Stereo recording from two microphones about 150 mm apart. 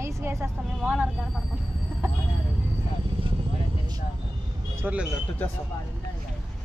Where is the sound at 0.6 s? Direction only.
5° right (ahead or behind).